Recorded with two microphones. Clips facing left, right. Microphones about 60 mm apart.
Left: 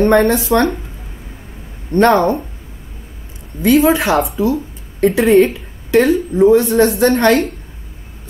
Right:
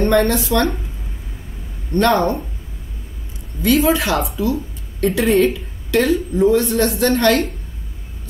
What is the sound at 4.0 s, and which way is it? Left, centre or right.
A woman's voice, centre.